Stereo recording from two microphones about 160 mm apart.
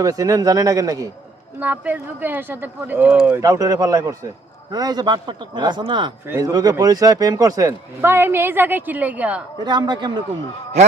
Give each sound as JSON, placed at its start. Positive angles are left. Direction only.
{"t": 0.0, "sound": "a man's voice", "side_deg": -20}
{"t": 1.5, "sound": "speech", "side_deg": -10}
{"t": 3.4, "sound": "a man's voice", "side_deg": -20}
{"t": 9.6, "sound": "a man's voice", "side_deg": -25}